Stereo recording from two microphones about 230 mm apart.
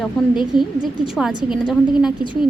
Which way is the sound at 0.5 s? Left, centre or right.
Left.